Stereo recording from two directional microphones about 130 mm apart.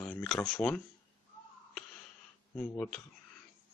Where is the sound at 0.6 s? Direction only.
10° left (ahead or behind).